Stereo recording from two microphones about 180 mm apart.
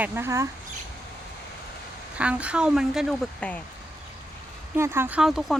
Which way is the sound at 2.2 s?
5° right (ahead or behind).